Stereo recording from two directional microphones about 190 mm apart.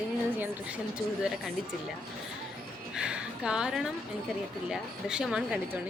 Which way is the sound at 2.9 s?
5° right (ahead or behind).